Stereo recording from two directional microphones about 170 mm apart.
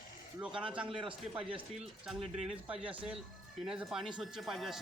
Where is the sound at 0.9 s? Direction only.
30° right (ahead or behind).